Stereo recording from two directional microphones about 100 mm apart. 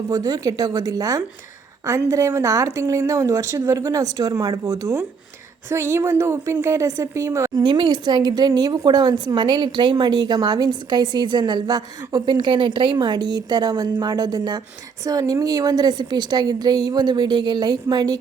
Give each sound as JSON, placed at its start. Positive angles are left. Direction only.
{"t": 0.1, "sound": "a woman's voice", "side_deg": -40}
{"t": 7.6, "sound": "speech", "side_deg": -45}